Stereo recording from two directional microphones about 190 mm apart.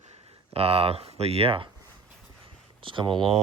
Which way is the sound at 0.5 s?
30° right (ahead or behind).